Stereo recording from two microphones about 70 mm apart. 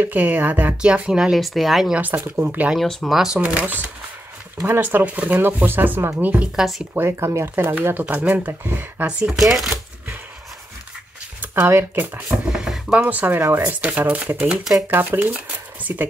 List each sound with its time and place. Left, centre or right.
0.0 s speech: right
1.4 s speech: centre
2.0 s speech: right
3.1 s speech: centre
3.3 s speech: centre
6.5 s speech: centre
6.9 s speech: right
9.4 s speech: centre
11.5 s speech: right
12.4 s a sound: centre
13.0 s speech: right
14.3 s speech: centre
14.9 s speech: right